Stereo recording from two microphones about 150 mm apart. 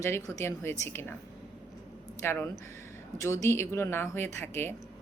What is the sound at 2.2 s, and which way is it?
A woman's voice, 15° left (ahead or behind).